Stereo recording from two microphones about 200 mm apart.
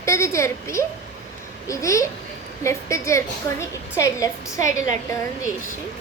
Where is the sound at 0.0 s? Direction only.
15° left (ahead or behind).